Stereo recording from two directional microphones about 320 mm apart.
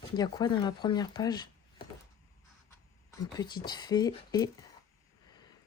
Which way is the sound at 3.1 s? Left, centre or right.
Centre.